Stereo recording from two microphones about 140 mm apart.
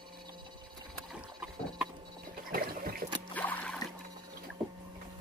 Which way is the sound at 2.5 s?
90° right.